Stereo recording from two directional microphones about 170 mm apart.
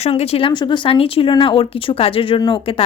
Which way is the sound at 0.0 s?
40° left (ahead or behind).